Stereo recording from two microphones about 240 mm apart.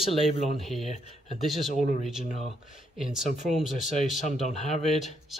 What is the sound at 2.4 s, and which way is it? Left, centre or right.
Speech, centre.